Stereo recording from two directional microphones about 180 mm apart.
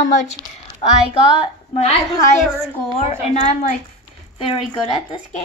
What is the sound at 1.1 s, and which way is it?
Speech, 30° left (ahead or behind).